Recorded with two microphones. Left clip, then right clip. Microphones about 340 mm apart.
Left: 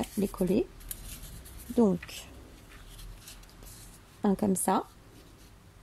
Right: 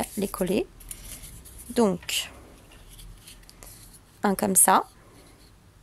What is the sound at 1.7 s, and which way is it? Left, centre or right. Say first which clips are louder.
Speech: right 4 dB; right.